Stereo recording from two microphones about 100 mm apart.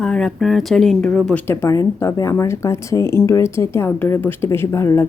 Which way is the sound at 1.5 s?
35° left (ahead or behind).